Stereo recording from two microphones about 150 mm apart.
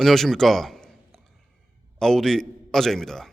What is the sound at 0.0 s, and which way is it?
A man's voice, centre (ahead or behind).